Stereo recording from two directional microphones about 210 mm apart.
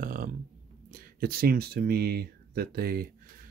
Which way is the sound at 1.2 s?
45° right (ahead or behind).